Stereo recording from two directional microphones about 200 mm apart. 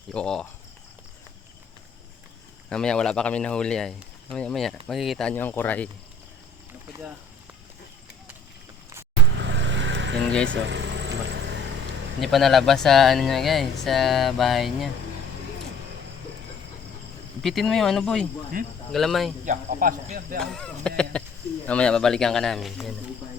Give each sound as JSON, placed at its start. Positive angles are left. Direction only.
{"t": 0.1, "sound": "speech", "side_deg": 5}
{"t": 2.6, "sound": "speech", "side_deg": 5}
{"t": 9.4, "sound": "vehicle", "side_deg": -65}
{"t": 10.2, "sound": "speech", "side_deg": 5}
{"t": 10.5, "sound": "vehicle", "side_deg": -60}
{"t": 12.2, "sound": "speech", "side_deg": 0}
{"t": 17.4, "sound": "speech", "side_deg": 0}
{"t": 18.5, "sound": "speech", "side_deg": -45}
{"t": 18.9, "sound": "speech", "side_deg": 0}
{"t": 19.5, "sound": "speech", "side_deg": -45}
{"t": 20.4, "sound": "speech", "side_deg": 5}